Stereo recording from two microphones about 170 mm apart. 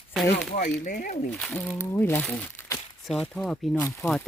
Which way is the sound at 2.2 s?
5° left (ahead or behind).